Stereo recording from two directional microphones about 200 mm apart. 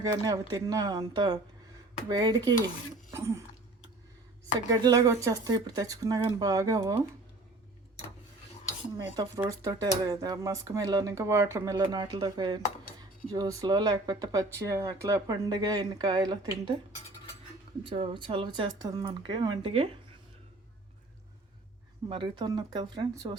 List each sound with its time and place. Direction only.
0.0 s speech: 20° right (ahead or behind)
3.1 s throat clearing: 15° right (ahead or behind)
4.7 s speech: 20° right (ahead or behind)
9.0 s speech: 15° right (ahead or behind)
17.8 s speech: 25° right (ahead or behind)
22.1 s speech: 25° right (ahead or behind)